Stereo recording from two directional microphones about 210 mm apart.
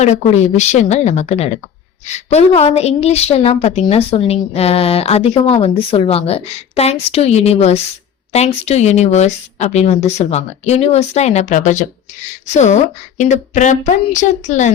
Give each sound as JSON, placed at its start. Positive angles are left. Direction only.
{"t": 0.0, "sound": "a woman's voice", "side_deg": 30}